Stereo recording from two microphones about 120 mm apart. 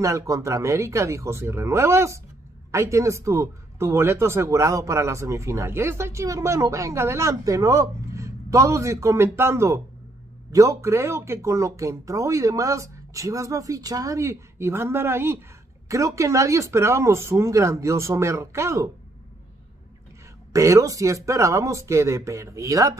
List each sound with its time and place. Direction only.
0.0 s speech: 25° right (ahead or behind)
20.5 s speech: 25° right (ahead or behind)